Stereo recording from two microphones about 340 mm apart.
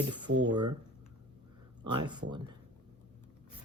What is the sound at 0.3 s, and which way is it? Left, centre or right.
Speech, right.